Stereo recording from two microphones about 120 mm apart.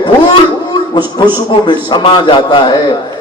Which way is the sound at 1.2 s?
35° left (ahead or behind).